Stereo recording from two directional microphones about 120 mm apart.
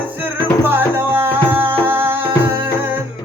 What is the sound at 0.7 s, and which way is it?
Music, 20° right (ahead or behind).